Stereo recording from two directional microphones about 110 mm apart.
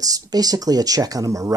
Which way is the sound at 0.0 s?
35° right (ahead or behind).